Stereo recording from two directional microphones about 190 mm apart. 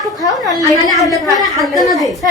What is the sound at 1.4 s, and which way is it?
Speech, centre (ahead or behind).